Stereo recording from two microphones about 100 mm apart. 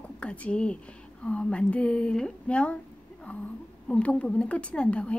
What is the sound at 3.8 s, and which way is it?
Speech, 10° left (ahead or behind).